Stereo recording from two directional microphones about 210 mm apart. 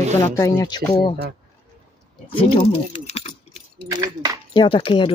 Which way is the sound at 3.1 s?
30° left (ahead or behind).